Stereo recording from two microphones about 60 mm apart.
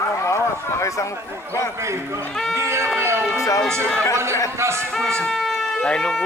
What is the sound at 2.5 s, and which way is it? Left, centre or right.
Speech, right.